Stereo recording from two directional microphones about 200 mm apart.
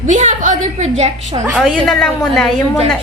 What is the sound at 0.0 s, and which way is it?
A woman's voice, 40° right (ahead or behind).